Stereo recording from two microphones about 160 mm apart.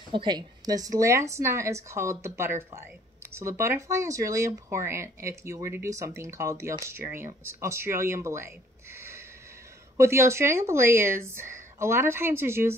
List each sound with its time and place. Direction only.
0.1 s speech: 30° right (ahead or behind)
8.9 s a sound: 15° right (ahead or behind)
9.9 s speech: 15° right (ahead or behind)